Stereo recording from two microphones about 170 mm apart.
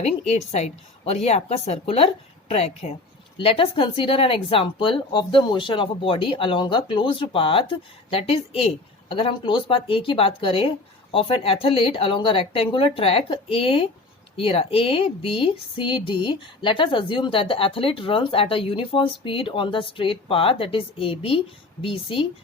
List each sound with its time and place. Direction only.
0.3 s speech: 40° left (ahead or behind)